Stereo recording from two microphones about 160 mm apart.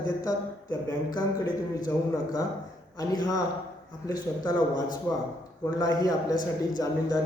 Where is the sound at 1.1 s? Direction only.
25° left (ahead or behind).